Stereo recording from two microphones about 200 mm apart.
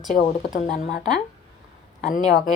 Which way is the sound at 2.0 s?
40° left (ahead or behind).